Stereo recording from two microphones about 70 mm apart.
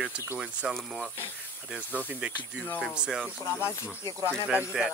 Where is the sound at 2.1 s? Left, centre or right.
Centre.